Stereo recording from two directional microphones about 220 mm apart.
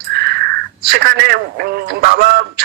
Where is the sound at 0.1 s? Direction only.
45° right (ahead or behind).